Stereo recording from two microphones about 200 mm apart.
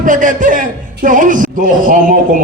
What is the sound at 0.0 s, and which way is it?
A man's voice, 40° right (ahead or behind).